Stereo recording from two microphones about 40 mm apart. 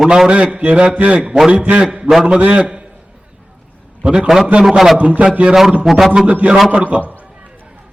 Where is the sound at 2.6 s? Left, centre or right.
Right.